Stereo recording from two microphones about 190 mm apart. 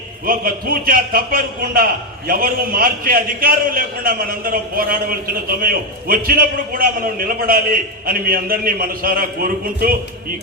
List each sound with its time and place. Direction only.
0.3 s a man's voice: 50° right (ahead or behind)